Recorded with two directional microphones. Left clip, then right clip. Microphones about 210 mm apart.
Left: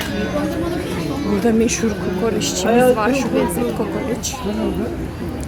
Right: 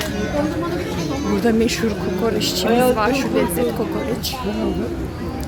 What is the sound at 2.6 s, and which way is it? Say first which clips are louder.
Speech: left 3 dB; 40° left (ahead or behind).